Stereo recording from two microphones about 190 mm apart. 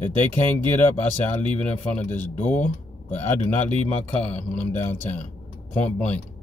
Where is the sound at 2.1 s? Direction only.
40° left (ahead or behind).